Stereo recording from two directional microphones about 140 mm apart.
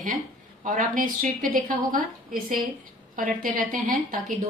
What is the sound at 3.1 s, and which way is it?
A woman's voice, 75° right (ahead or behind).